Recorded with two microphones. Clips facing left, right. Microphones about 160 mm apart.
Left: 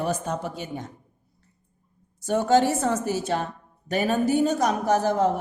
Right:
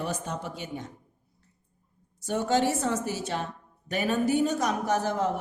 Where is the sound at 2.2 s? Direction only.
40° left (ahead or behind).